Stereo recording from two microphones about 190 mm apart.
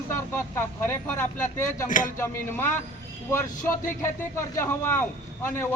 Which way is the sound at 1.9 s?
45° left (ahead or behind).